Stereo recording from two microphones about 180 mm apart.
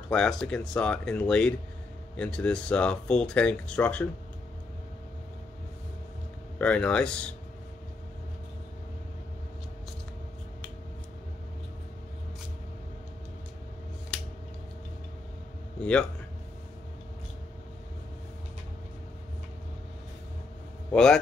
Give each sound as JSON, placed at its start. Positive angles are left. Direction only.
{"t": 0.1, "sound": "speech", "side_deg": 5}
{"t": 6.6, "sound": "speech", "side_deg": 5}
{"t": 15.8, "sound": "speech", "side_deg": 5}
{"t": 20.9, "sound": "speech", "side_deg": 5}